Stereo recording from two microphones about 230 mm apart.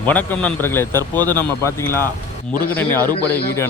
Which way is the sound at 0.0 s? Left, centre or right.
Centre.